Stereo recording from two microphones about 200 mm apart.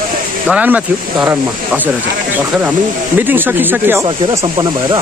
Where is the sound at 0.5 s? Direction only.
5° right (ahead or behind).